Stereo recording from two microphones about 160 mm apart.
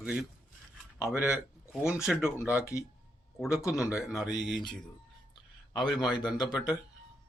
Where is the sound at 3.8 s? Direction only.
5° right (ahead or behind).